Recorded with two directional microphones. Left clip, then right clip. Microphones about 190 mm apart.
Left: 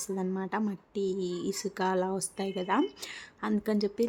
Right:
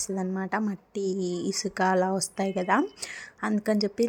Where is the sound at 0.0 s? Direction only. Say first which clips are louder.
Right 2 dB; 10° right (ahead or behind).